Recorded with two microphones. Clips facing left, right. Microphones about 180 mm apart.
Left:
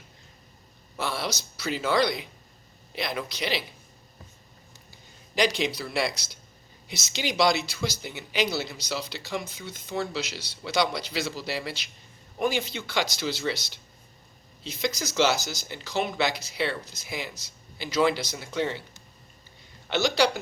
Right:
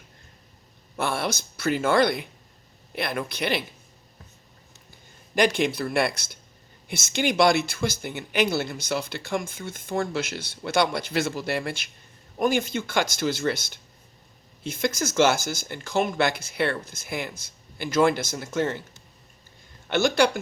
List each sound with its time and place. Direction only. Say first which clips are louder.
0.9 s speech: right 4 dB; 55° right (ahead or behind)
5.3 s speech: right 3 dB; 55° right (ahead or behind)
19.9 s speech: right 3 dB; 50° right (ahead or behind)